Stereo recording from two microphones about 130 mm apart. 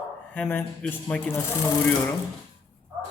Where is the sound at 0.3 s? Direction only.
10° left (ahead or behind).